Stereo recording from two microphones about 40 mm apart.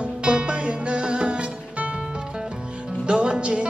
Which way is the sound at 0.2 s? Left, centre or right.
Right.